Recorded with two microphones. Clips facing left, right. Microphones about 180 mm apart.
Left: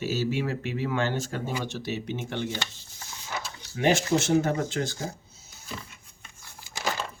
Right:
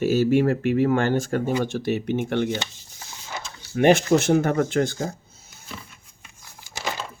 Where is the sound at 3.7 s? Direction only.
60° right (ahead or behind).